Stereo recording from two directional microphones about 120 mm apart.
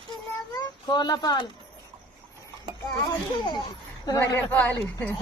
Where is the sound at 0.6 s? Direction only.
35° left (ahead or behind).